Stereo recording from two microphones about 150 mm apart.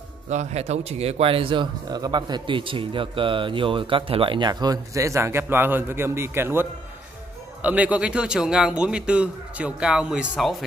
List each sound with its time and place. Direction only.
0.3 s a man's voice: 50° right (ahead or behind); by 10.5 s 5° right (ahead or behind)